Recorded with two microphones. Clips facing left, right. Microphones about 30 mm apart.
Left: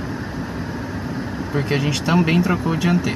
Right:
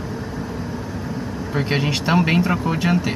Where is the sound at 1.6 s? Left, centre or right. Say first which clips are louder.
Right 1 dB; right.